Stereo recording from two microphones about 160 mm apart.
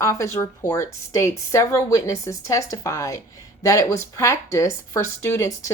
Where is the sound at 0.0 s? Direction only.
20° left (ahead or behind).